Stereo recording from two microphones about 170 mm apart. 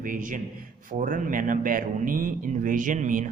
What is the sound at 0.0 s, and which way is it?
A man's voice, 50° right (ahead or behind).